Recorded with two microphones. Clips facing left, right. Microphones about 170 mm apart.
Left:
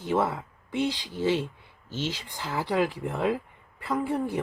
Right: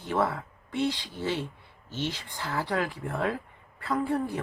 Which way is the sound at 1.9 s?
90° left.